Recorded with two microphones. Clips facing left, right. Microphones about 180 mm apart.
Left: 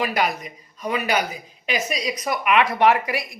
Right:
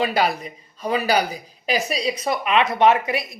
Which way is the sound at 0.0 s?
30° right (ahead or behind).